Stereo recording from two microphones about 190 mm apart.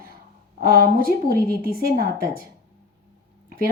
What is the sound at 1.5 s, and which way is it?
Speech, 50° right (ahead or behind).